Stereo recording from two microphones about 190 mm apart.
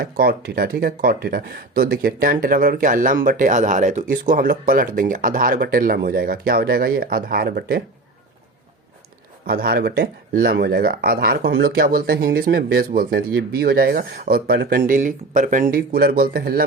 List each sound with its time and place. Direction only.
0.0 s speech: 55° right (ahead or behind)
9.5 s speech: 55° right (ahead or behind)